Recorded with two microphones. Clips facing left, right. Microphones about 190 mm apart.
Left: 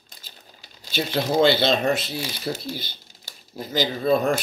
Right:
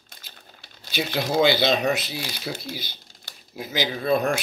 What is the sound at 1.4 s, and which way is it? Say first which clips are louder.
Speech: left 1 dB; 10° right (ahead or behind).